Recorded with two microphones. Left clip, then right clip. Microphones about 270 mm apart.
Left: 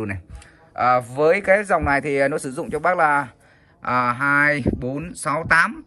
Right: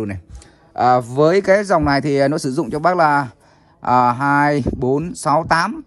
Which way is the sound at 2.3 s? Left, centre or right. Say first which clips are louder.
Right 5 dB; right.